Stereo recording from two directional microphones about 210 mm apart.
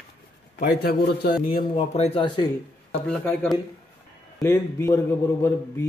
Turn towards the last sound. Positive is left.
turn(degrees=10)  # may be behind; listen again after turning